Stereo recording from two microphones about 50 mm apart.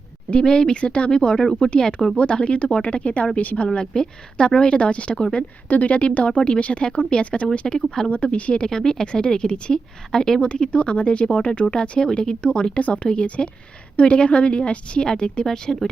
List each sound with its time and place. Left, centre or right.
0.3 s a woman's voice: centre
3.7 s speech: centre
5.6 s a woman's voice: left; by 8.1 s centre
8.1 s a woman's voice: left
8.7 s speech: centre
10.4 s a woman's voice: left